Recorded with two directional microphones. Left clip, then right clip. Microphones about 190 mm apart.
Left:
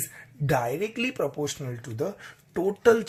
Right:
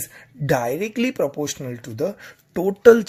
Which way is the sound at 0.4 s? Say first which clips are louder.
Right 5 dB; 35° right (ahead or behind).